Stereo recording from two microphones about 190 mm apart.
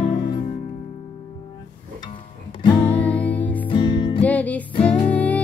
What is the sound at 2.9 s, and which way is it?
Music, 10° left (ahead or behind).